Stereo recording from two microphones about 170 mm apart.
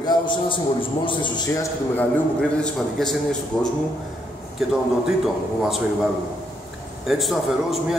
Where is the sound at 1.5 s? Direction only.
20° left (ahead or behind).